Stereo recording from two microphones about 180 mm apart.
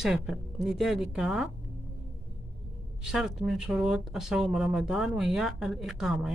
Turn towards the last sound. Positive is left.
turn(degrees=-5)  # may be behind; listen again after turning